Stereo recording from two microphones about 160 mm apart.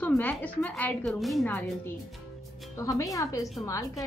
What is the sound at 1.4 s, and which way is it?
A woman's voice, 10° left (ahead or behind).